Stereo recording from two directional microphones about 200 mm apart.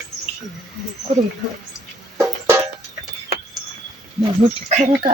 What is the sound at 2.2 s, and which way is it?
Music, 10° right (ahead or behind).